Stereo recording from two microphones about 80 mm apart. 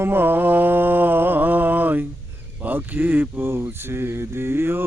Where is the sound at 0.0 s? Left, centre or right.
Right.